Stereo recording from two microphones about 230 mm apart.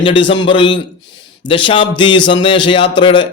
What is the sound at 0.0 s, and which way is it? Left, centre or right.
Speech, left.